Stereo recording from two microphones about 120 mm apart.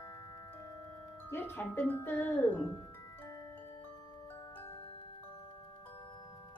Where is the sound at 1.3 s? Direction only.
20° left (ahead or behind).